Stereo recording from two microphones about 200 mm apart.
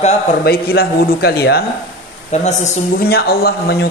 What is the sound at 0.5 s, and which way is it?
Speech, 50° left (ahead or behind).